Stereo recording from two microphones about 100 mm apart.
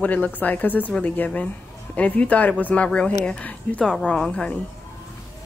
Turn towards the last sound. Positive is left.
turn(degrees=10)  # may be behind; listen again after turning